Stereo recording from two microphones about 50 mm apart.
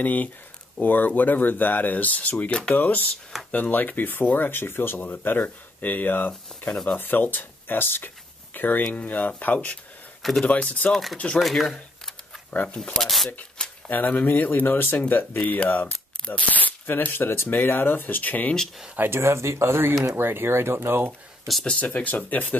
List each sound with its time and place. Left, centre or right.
0.0 s speech: left
5.0 s speech: left
8.8 s speech: left
10.9 s speech: centre
12.6 s speech: centre
13.0 s speech: centre
13.8 s speech: left
18.9 s speech: right
21.6 s speech: left